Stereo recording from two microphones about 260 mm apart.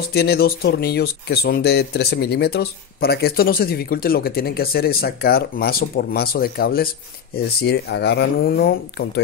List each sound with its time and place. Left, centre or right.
0.1 s speech: left